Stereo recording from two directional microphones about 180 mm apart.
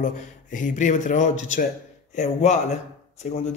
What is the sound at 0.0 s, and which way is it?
Speech, 45° left (ahead or behind).